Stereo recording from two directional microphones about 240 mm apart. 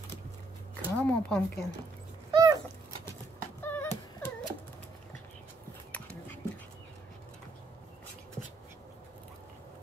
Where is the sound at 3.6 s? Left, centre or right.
Centre.